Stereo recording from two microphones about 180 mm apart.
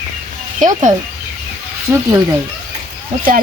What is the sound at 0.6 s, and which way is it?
Speech, 45° right (ahead or behind).